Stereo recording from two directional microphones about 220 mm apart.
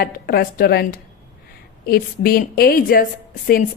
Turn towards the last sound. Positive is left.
turn(degrees=40)  # may be behind; listen again after turning